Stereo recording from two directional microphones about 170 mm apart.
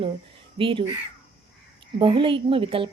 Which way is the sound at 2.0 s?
30° right (ahead or behind).